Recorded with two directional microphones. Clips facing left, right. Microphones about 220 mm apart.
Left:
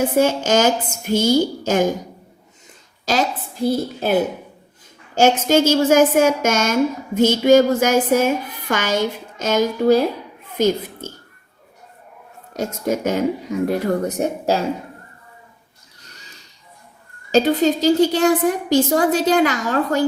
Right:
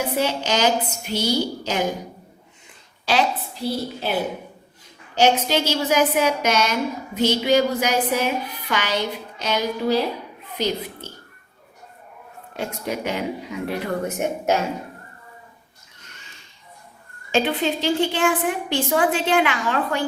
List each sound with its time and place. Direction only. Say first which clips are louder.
0.2 s a woman's voice: left 6 dB; 45° left (ahead or behind)
3.1 s a woman's voice: left 1 dB; 45° left (ahead or behind)
12.5 s a woman's voice: left 6 dB; 45° left (ahead or behind)
16.0 s a sound: left 3 dB; 40° left (ahead or behind)
17.3 s a woman's voice: left 6 dB; 40° left (ahead or behind)